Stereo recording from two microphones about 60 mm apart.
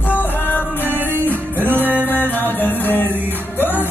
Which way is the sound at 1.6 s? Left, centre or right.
Right.